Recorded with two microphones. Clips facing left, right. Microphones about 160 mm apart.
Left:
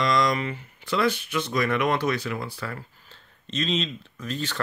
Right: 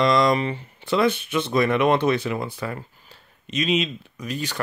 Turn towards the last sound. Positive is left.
turn(degrees=-10)  # may be behind; listen again after turning